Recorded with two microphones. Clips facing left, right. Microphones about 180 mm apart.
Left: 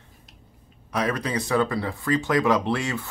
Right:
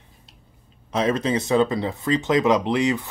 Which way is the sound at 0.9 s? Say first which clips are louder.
Right 4 dB; 25° right (ahead or behind).